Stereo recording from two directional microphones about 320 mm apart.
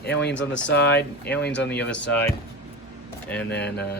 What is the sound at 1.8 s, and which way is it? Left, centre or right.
Speech, centre.